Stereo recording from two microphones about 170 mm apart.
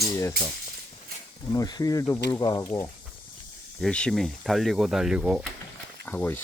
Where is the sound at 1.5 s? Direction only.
20° left (ahead or behind).